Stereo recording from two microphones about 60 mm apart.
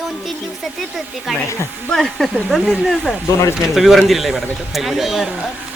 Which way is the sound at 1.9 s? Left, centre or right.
Centre.